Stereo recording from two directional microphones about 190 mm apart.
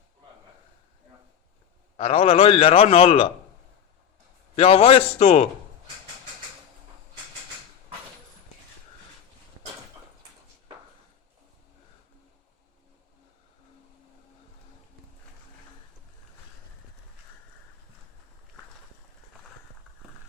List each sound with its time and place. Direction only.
2.0 s a man's voice: 30° left (ahead or behind)
4.5 s a man's voice: 30° left (ahead or behind)